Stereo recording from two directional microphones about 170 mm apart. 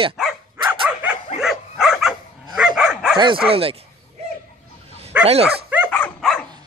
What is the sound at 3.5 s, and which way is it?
Speech, 35° right (ahead or behind).